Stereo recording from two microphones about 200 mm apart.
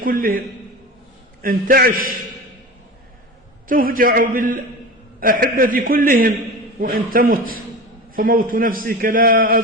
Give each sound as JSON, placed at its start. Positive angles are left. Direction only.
{"t": 0.0, "sound": "a man's voice", "side_deg": -45}
{"t": 3.7, "sound": "a man's voice", "side_deg": -45}